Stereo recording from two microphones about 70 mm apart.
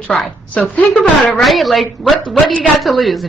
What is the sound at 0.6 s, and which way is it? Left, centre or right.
Speech, left.